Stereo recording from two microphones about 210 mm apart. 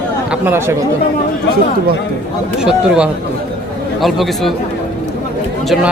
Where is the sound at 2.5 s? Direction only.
5° right (ahead or behind).